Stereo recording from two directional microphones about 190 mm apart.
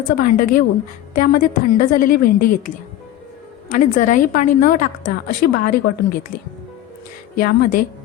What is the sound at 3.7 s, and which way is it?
A woman's voice, 40° left (ahead or behind).